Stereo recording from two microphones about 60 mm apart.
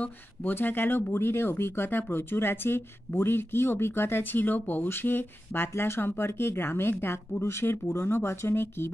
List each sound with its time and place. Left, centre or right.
0.0 s speech: left